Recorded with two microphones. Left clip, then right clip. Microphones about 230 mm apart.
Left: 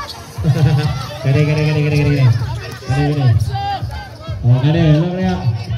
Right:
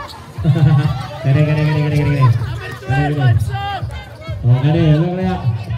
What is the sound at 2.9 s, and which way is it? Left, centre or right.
Speech, right.